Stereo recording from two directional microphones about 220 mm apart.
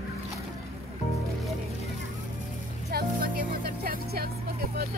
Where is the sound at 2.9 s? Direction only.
40° right (ahead or behind).